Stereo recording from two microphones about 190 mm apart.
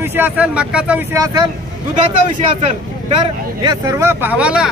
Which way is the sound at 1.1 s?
20° right (ahead or behind).